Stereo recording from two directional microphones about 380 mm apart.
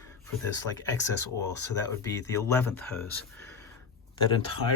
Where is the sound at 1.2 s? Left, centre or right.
Centre.